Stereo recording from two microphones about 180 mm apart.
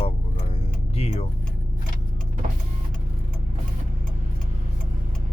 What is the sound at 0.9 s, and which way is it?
Music, 35° left (ahead or behind).